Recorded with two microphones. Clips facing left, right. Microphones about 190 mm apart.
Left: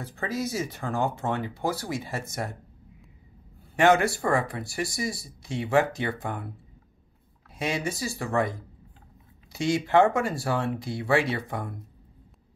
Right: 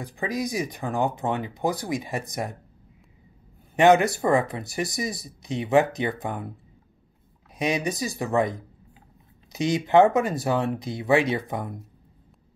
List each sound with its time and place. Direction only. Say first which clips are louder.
0.0 s speech: right 2 dB; 15° right (ahead or behind)
3.7 s speech: right 3 dB; 20° right (ahead or behind)
7.5 s speech: right 4 dB; 20° right (ahead or behind)